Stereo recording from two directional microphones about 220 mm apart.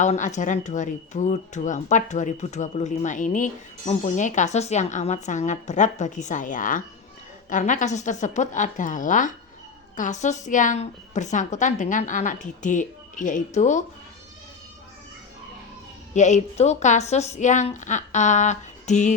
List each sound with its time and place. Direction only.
0.0 s speech: 35° left (ahead or behind)
16.1 s speech: 30° left (ahead or behind)